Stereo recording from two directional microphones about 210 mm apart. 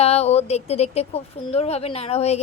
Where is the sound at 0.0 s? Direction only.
30° left (ahead or behind).